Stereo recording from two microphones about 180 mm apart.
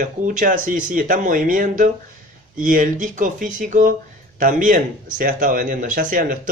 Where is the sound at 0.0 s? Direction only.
45° right (ahead or behind).